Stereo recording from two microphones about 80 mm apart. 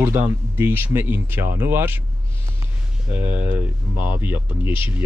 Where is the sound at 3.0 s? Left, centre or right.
Right.